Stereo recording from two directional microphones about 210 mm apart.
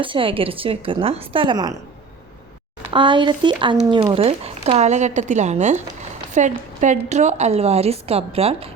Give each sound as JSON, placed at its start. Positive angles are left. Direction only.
{"t": 0.0, "sound": "a woman's voice", "side_deg": -25}
{"t": 2.9, "sound": "a woman's voice", "side_deg": -25}